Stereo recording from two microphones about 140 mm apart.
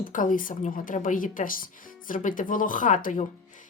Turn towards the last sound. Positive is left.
turn(degrees=70)  # may be behind; listen again after turning